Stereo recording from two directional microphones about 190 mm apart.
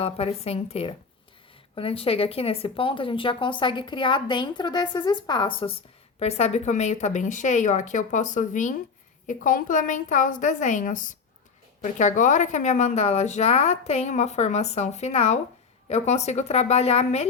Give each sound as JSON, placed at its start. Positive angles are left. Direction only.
{"t": 0.0, "sound": "a woman's voice", "side_deg": 30}